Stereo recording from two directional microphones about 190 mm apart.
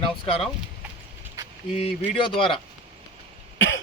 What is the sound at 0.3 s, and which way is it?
Speech, 30° left (ahead or behind).